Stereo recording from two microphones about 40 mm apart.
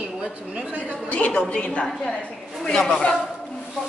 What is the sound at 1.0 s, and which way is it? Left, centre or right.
Speech, left.